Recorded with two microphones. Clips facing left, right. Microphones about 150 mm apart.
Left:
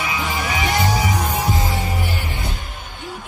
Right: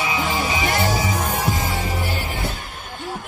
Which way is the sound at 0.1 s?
20° right (ahead or behind).